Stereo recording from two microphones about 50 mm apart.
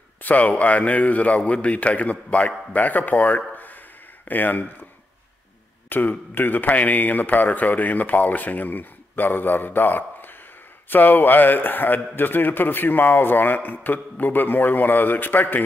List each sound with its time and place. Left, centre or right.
0.2 s a man's voice: left
5.9 s a man's voice: left